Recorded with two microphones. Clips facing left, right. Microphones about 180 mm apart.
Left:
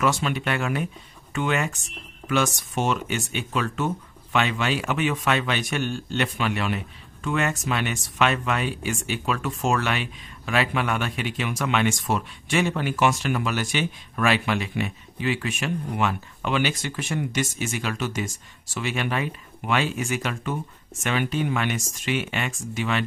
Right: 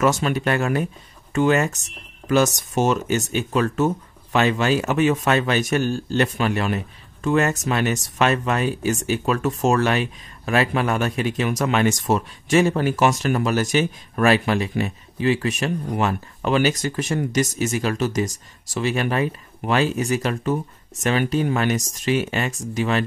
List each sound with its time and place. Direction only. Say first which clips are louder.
0.0 s speech: right 4 dB; 45° right (ahead or behind)